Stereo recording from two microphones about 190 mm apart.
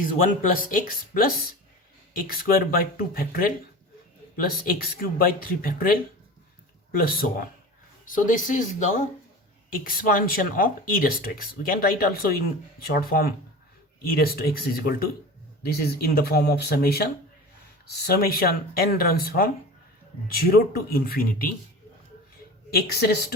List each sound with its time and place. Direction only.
0.0 s speech: 45° left (ahead or behind)
22.7 s speech: 60° left (ahead or behind)